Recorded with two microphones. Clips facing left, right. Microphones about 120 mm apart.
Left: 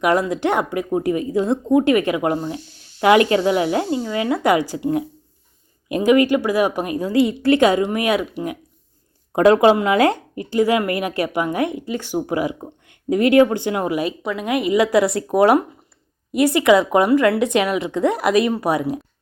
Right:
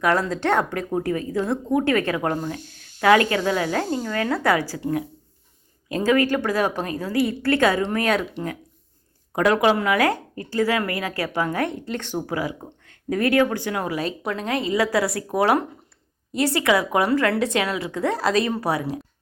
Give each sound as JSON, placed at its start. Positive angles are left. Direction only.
{"t": 0.0, "sound": "a woman's voice", "side_deg": 15}
{"t": 2.6, "sound": "a sound", "side_deg": -50}
{"t": 3.0, "sound": "a woman's voice", "side_deg": 20}
{"t": 9.3, "sound": "a woman's voice", "side_deg": 25}
{"t": 12.2, "sound": "a woman's voice", "side_deg": 20}